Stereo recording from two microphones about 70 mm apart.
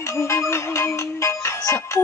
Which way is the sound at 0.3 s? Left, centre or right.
Left.